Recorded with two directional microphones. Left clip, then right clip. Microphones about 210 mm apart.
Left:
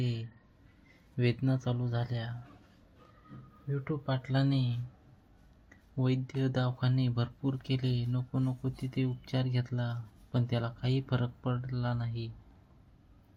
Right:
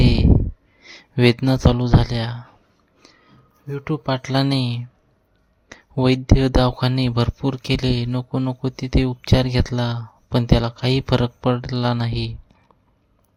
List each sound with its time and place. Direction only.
0.0 s a sound: 55° right (ahead or behind)
0.9 s speech: 55° right (ahead or behind)
3.7 s speech: 50° right (ahead or behind)